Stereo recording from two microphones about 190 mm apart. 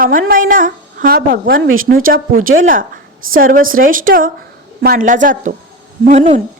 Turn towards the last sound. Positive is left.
turn(degrees=-40)  # may be behind; listen again after turning